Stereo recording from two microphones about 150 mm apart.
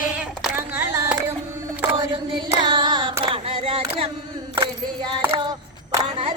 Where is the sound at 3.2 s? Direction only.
35° right (ahead or behind).